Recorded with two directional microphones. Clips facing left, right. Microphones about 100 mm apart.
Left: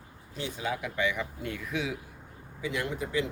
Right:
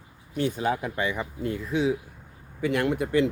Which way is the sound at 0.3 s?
45° right (ahead or behind).